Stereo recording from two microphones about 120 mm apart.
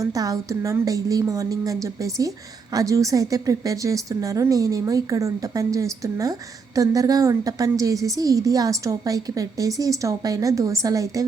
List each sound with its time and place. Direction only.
0.0 s a woman's voice: 30° right (ahead or behind)